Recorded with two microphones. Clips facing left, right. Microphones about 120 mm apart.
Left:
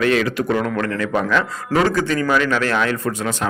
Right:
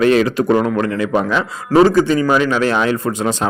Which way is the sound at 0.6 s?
15° right (ahead or behind).